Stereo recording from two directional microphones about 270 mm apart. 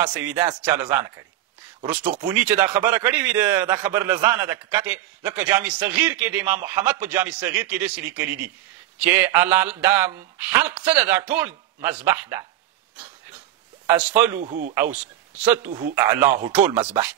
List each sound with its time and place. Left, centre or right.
0.0 s speech: centre
13.8 s speech: centre
14.4 s speech: right
14.7 s speech: centre
16.6 s speech: right